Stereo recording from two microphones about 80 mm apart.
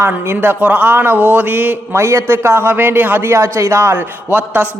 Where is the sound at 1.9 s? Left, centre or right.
Right.